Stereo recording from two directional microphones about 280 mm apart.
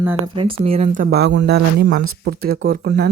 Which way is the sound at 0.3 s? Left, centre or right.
Centre.